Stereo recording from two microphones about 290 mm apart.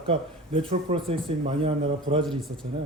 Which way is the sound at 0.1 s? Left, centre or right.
Centre.